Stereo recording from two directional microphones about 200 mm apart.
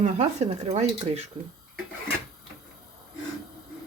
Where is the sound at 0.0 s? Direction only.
35° right (ahead or behind).